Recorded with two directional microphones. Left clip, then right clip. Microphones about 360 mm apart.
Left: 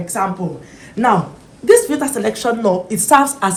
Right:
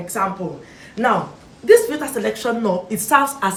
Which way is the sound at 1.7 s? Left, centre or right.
Centre.